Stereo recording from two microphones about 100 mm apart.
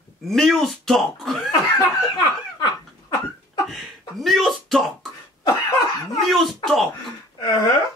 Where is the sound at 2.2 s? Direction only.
50° left (ahead or behind).